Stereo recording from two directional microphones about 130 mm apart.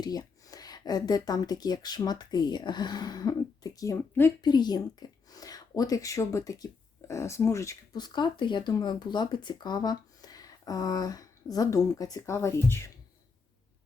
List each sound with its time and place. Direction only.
0.0 s speech: 30° left (ahead or behind)
4.4 s speech: 35° left (ahead or behind)